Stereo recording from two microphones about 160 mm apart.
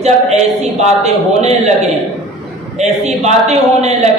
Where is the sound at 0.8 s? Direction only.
45° right (ahead or behind).